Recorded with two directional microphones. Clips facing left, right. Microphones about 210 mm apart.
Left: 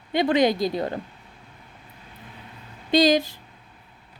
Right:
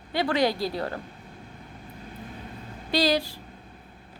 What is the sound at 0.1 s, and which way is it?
Speech, 20° left (ahead or behind).